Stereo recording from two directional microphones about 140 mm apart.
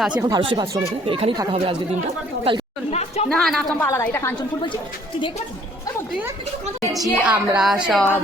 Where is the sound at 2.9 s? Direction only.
50° left (ahead or behind).